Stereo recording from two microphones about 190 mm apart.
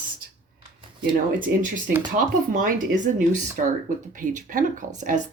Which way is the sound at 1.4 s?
45° right (ahead or behind).